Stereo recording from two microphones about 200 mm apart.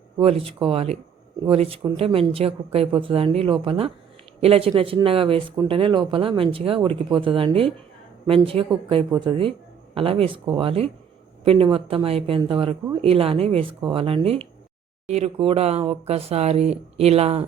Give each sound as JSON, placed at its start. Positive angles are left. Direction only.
{"t": 0.2, "sound": "speech", "side_deg": -30}